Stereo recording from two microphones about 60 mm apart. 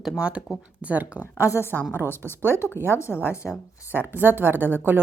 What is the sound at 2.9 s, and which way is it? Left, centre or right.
Speech, left.